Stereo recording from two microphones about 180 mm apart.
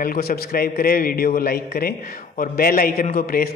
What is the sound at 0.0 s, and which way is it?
A man's voice, 55° left (ahead or behind).